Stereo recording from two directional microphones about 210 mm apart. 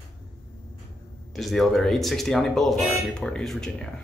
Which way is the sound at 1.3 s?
Centre (ahead or behind).